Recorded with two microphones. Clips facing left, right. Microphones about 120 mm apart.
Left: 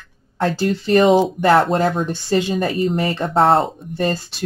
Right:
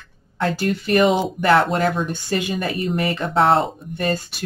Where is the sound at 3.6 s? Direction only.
30° left (ahead or behind).